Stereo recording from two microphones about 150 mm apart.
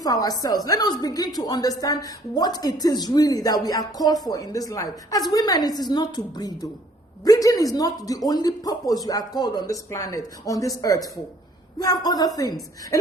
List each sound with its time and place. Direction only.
0.0 s speech: 25° left (ahead or behind)